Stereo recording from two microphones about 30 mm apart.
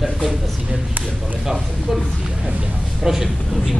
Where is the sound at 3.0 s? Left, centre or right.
Centre.